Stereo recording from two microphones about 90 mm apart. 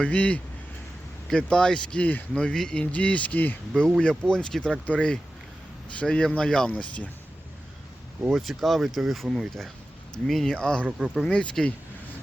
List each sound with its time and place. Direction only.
0.0 s speech: 15° left (ahead or behind)
3.8 s speech: 5° left (ahead or behind)
8.3 s speech: centre (ahead or behind)
10.8 s speech: 10° right (ahead or behind)
11.2 s speech: 10° left (ahead or behind)